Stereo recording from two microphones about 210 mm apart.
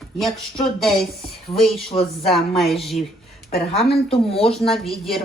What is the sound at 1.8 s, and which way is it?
Speech, 30° left (ahead or behind).